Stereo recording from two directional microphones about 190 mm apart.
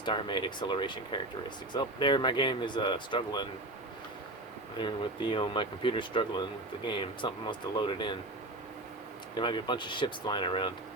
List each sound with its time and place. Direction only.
0.0 s speech: 25° left (ahead or behind)
4.8 s speech: 25° left (ahead or behind)
9.3 s speech: 25° left (ahead or behind)